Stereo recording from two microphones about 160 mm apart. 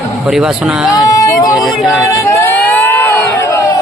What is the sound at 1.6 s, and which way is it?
Speech, centre (ahead or behind).